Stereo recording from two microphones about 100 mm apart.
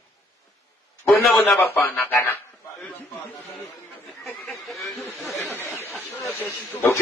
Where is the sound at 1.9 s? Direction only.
20° left (ahead or behind).